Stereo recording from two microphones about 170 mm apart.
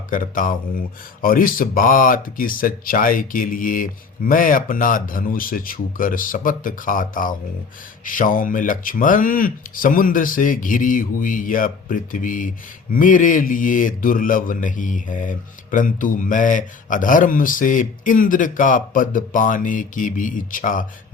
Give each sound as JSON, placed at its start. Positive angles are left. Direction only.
{"t": 0.1, "sound": "a man's voice", "side_deg": 50}